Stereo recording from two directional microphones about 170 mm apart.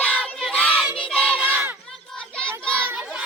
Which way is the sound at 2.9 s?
5° right (ahead or behind).